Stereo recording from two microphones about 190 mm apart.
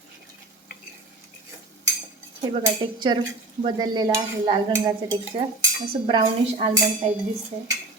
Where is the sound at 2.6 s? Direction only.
25° right (ahead or behind).